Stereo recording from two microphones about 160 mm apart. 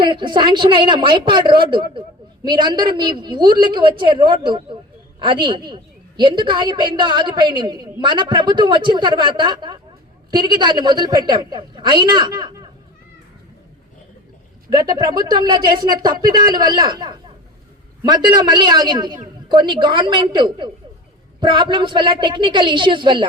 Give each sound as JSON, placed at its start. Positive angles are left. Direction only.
{"t": 0.0, "sound": "a woman's voice", "side_deg": -30}
{"t": 14.7, "sound": "a woman's voice", "side_deg": -25}